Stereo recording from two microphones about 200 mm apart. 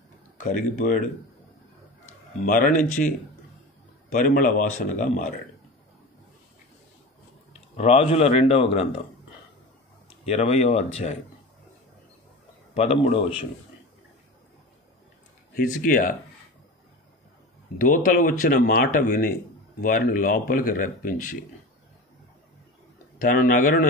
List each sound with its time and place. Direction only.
0.4 s speech: 40° left (ahead or behind)
2.4 s speech: 45° left (ahead or behind)
4.1 s speech: 45° left (ahead or behind)
7.7 s speech: 30° left (ahead or behind)
10.0 s speech: 30° left (ahead or behind)
12.7 s speech: 30° left (ahead or behind)
15.5 s speech: 40° left (ahead or behind)
17.7 s speech: 40° left (ahead or behind)
23.1 s speech: 40° left (ahead or behind)